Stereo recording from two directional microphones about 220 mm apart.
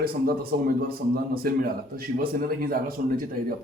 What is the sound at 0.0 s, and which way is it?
Speech, 45° right (ahead or behind).